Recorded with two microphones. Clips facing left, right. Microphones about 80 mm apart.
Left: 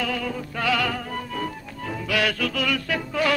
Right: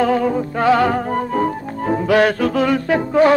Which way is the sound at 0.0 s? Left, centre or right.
Right.